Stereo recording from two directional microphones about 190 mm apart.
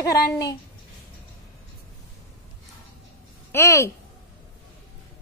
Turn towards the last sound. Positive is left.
turn(degrees=15)  # may be behind; listen again after turning